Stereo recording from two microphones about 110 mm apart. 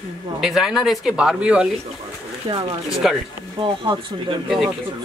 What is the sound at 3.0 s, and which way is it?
Speech, 5° right (ahead or behind).